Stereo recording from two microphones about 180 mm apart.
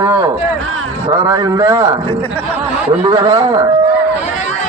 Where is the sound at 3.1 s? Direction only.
25° right (ahead or behind).